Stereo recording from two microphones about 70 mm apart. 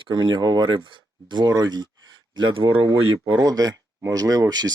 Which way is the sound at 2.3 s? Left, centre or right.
Right.